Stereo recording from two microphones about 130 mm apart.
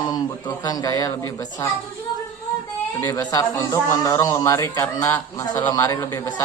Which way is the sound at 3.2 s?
30° left (ahead or behind).